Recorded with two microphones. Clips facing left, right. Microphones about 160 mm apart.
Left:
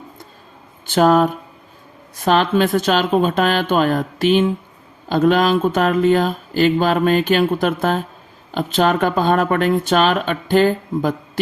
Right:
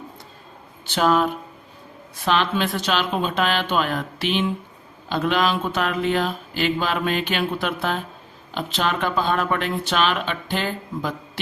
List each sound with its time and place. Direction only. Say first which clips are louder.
0.9 s speech: left 6 dB; 45° left (ahead or behind)